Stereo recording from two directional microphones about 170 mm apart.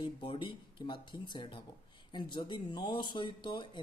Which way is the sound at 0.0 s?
30° left (ahead or behind).